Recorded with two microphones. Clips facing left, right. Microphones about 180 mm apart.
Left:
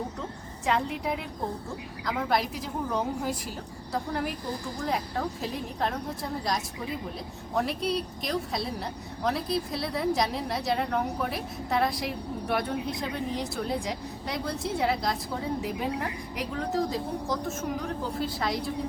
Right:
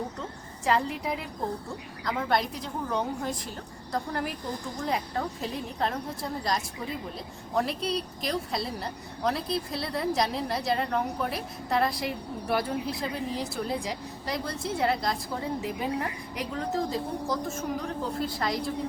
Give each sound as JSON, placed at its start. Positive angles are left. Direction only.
{"t": 0.6, "sound": "a woman's voice", "side_deg": 0}
{"t": 7.5, "sound": "a woman's voice", "side_deg": 0}